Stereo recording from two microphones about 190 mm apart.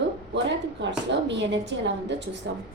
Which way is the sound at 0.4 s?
70° right (ahead or behind).